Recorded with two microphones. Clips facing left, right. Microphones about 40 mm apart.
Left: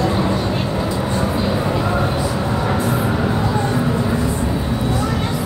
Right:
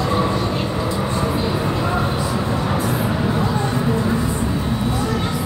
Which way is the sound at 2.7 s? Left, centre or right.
Centre.